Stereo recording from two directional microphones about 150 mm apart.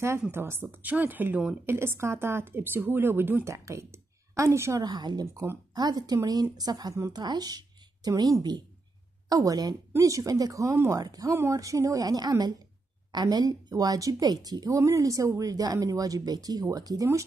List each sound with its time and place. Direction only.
0.2 s a woman's voice: 15° right (ahead or behind)